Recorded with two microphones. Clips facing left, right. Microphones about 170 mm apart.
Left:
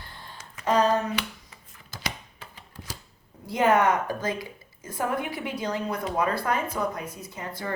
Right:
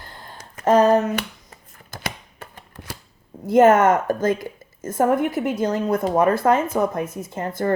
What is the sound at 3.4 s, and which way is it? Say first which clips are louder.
A woman's voice: right 8 dB; 45° right (ahead or behind).